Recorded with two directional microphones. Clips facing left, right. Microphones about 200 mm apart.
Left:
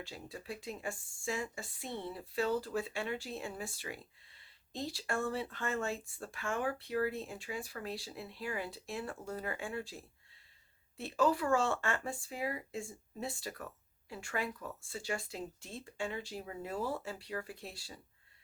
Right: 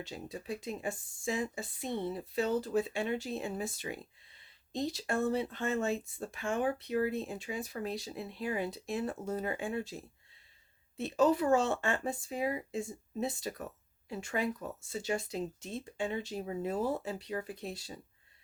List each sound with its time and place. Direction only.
0.0 s speech: 20° right (ahead or behind)